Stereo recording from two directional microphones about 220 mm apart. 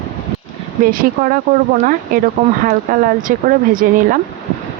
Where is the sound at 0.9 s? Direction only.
40° right (ahead or behind).